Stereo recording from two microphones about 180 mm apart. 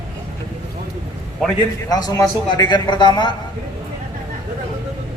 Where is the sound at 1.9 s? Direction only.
20° left (ahead or behind).